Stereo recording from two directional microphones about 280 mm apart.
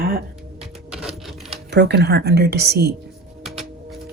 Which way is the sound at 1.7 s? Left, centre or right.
Right.